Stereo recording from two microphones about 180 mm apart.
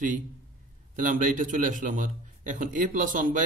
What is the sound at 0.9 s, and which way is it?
A man's voice, 45° right (ahead or behind).